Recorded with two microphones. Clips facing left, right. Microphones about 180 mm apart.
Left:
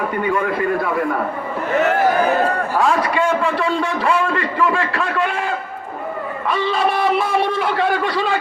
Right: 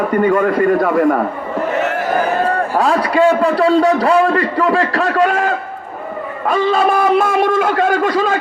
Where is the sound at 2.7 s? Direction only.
40° right (ahead or behind).